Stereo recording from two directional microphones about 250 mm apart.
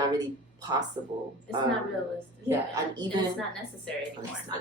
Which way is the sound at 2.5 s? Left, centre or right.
Centre.